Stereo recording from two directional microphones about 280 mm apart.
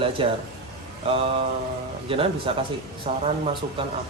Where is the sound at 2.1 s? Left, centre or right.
Centre.